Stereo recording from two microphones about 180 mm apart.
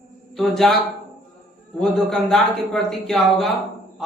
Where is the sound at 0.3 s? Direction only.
Centre (ahead or behind).